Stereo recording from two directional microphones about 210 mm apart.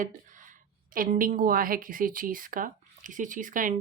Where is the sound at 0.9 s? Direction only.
40° right (ahead or behind).